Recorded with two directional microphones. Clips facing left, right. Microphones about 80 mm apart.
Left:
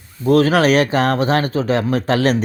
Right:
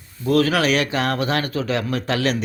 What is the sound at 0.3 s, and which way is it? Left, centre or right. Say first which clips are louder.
Speech: left 5 dB; left.